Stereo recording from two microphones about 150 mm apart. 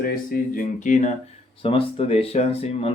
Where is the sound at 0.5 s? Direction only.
55° left (ahead or behind).